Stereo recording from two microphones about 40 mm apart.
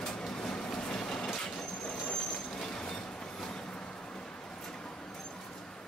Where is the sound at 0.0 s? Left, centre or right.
Centre.